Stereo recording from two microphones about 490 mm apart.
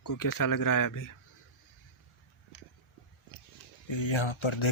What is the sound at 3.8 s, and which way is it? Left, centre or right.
Speech, left.